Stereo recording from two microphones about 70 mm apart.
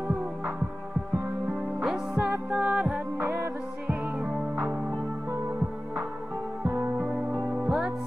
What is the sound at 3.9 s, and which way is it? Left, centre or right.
Music, centre.